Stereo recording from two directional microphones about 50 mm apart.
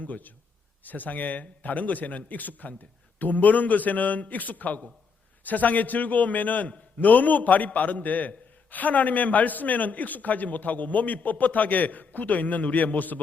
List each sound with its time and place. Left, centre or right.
0.0 s a man's voice: left